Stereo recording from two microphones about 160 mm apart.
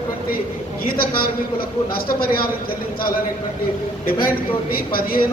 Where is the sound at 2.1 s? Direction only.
65° left (ahead or behind).